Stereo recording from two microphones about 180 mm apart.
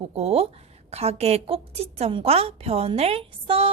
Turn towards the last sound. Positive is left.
turn(degrees=-30)  # may be behind; listen again after turning